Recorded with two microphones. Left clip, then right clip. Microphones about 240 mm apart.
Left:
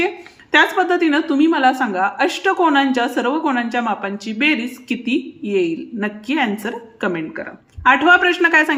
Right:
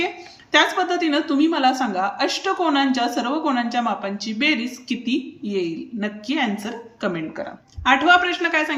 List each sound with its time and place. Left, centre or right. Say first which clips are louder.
0.5 s a woman's voice: left 4 dB; centre